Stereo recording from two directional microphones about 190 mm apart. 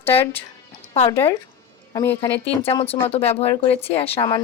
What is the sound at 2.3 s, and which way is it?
Speech, 30° left (ahead or behind).